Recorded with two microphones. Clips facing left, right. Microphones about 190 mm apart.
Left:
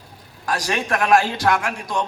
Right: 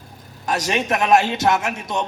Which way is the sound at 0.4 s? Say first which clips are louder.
Right 2 dB; 20° right (ahead or behind).